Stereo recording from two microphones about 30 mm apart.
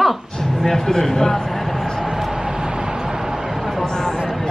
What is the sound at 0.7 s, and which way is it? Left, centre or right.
Speech, centre.